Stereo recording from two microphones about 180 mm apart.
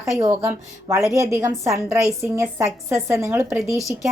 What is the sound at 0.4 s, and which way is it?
A woman's voice, 20° right (ahead or behind).